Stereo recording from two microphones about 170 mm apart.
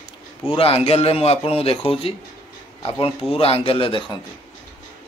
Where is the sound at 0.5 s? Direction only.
35° left (ahead or behind).